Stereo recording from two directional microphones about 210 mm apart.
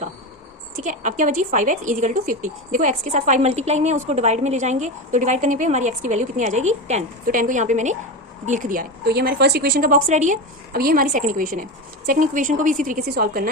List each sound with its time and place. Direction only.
0.9 s a woman's voice: 35° right (ahead or behind)